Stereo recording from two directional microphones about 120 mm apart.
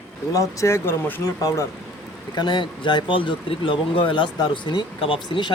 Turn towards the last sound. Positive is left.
turn(degrees=40)  # may be behind; listen again after turning